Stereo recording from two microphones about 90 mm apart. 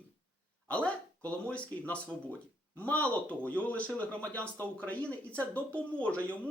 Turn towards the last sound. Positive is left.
turn(degrees=15)  # may be behind; listen again after turning